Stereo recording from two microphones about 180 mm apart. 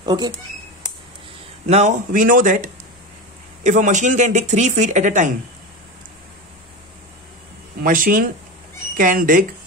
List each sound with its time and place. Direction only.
0.0 s speech: 25° right (ahead or behind)
1.7 s speech: 40° right (ahead or behind)
7.8 s speech: 50° right (ahead or behind)